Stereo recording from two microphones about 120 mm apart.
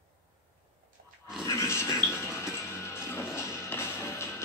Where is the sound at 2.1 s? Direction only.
20° left (ahead or behind).